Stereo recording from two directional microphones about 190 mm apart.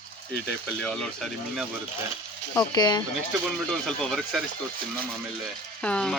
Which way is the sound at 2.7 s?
20° left (ahead or behind).